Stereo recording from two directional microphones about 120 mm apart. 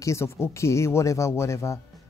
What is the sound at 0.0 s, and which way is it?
Speech, 25° left (ahead or behind).